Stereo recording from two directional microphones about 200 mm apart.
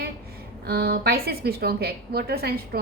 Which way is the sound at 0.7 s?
50° right (ahead or behind).